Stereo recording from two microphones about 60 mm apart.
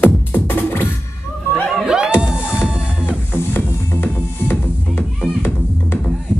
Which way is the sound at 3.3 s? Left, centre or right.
Left.